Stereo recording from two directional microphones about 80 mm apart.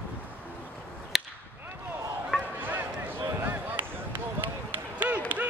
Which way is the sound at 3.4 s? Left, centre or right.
Right.